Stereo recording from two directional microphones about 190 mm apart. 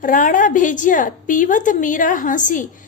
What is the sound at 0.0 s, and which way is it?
A woman's voice, 45° left (ahead or behind).